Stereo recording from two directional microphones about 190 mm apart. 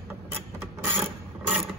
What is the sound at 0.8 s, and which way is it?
Mechanisms, 10° right (ahead or behind).